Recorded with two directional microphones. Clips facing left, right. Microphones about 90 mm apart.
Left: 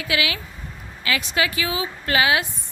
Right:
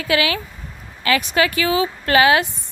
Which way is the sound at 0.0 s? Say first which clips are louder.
Right 5 dB; 45° right (ahead or behind).